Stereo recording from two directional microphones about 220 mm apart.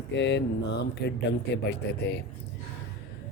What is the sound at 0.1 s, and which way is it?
Speech, 55° left (ahead or behind).